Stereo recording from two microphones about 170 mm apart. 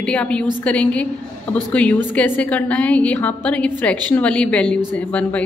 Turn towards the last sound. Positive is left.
turn(degrees=10)  # may be behind; listen again after turning